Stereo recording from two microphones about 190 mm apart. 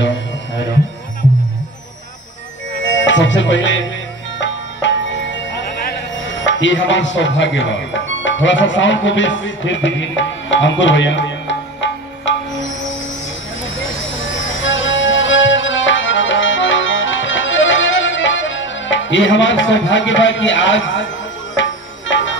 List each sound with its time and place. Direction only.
3.1 s speech: 75° left (ahead or behind)
4.4 s music: 75° left (ahead or behind)
5.9 s speech: 75° left (ahead or behind)
13.9 s music: 80° left
22.1 s music: 75° left (ahead or behind)